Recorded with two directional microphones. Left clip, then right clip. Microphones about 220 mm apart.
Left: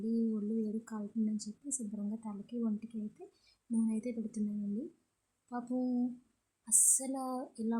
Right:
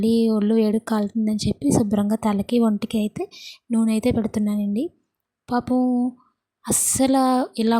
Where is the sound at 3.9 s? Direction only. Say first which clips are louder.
Right 18 dB; 40° right (ahead or behind).